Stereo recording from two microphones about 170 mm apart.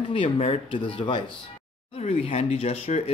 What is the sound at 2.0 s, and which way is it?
Speech, 40° left (ahead or behind).